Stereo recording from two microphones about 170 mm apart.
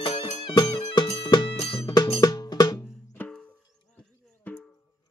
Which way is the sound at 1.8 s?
20° left (ahead or behind).